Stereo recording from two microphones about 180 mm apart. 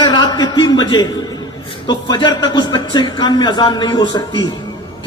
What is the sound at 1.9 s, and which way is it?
A man's voice, 25° left (ahead or behind).